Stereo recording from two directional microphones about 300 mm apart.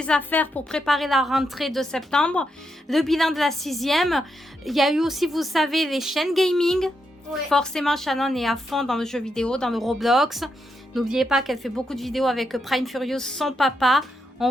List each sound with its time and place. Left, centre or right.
0.0 s a woman's voice: centre